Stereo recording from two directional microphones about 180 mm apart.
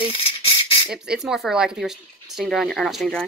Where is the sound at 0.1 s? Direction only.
30° left (ahead or behind).